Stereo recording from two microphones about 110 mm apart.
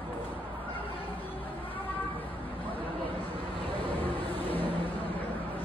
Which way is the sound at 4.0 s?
20° left (ahead or behind).